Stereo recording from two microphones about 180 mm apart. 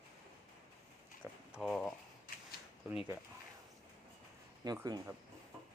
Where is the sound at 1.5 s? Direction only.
Centre (ahead or behind).